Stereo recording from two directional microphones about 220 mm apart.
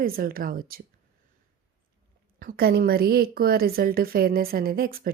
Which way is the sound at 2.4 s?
45° right (ahead or behind).